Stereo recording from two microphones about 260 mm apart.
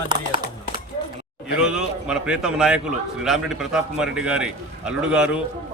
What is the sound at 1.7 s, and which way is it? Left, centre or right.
A man's voice, centre.